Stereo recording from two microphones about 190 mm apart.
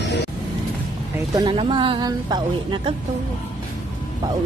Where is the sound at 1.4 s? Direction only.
25° right (ahead or behind).